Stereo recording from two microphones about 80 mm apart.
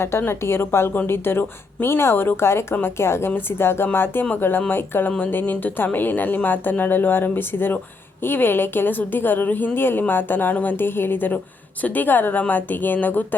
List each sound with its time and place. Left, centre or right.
0.0 s a woman's voice: left